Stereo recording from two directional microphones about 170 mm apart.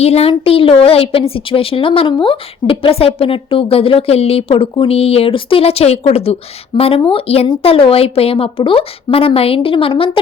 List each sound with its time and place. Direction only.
0.0 s a woman's voice: 35° left (ahead or behind)